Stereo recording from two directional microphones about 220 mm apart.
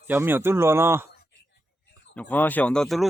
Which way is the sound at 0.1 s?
10° right (ahead or behind).